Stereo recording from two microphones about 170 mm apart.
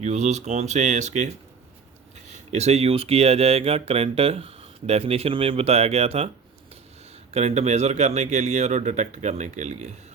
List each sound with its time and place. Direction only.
0.0 s speech: 40° right (ahead or behind)
2.5 s speech: 40° right (ahead or behind)
7.3 s speech: 40° right (ahead or behind)